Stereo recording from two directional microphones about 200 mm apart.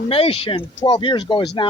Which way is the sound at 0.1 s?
30° left (ahead or behind).